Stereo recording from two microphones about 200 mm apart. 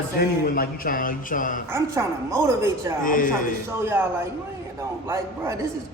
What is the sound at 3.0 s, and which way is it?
Speech, 45° left (ahead or behind).